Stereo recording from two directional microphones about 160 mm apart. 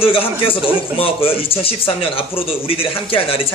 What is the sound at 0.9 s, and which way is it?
Speech, 35° left (ahead or behind).